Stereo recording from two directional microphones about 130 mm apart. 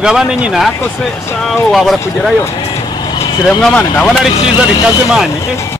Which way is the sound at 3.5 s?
5° left (ahead or behind).